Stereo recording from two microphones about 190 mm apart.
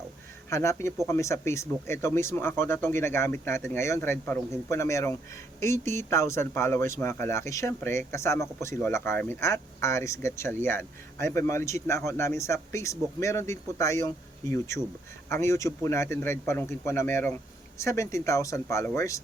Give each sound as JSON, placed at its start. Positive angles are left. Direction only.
{"t": 0.5, "sound": "speech", "side_deg": 15}